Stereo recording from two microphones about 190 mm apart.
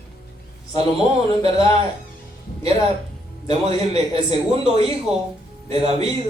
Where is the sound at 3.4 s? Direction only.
30° right (ahead or behind).